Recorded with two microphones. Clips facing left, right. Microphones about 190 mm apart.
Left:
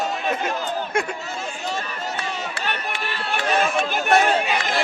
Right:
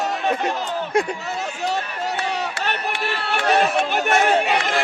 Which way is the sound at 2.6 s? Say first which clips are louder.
Right 3 dB; 70° right (ahead or behind).